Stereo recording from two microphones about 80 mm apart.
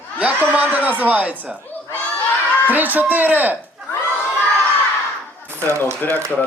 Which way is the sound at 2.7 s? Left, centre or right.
Right.